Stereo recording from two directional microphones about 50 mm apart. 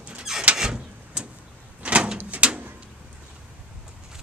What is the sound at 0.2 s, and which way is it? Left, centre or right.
Vehicle, centre.